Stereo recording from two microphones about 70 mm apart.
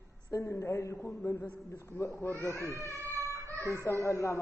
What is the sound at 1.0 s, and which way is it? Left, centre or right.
Speech, left.